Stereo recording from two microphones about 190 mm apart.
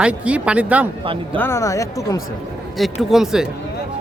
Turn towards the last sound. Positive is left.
turn(degrees=0)  # may be behind; listen again after turning